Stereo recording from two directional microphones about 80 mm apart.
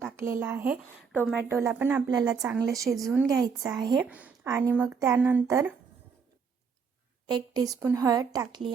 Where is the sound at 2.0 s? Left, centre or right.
Right.